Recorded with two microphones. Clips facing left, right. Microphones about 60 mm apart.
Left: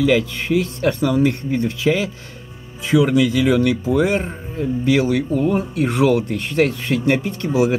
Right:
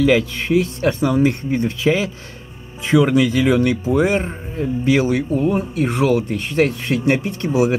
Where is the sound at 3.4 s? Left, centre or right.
Centre.